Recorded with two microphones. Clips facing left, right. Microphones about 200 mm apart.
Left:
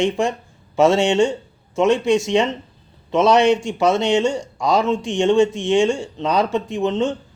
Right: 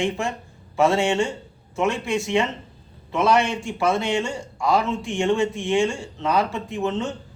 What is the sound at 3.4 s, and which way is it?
Speech, 75° left (ahead or behind).